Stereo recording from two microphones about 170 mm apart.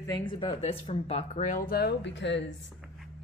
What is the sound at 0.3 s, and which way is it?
Speech, 25° left (ahead or behind).